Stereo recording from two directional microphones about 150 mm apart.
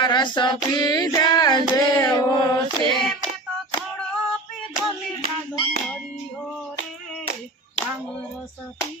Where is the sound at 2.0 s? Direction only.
30° left (ahead or behind).